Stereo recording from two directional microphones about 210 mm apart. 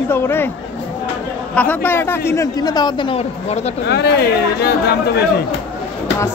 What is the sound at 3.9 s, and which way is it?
Speech, 50° left (ahead or behind).